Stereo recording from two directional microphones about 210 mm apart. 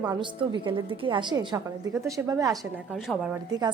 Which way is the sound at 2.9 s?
Centre (ahead or behind).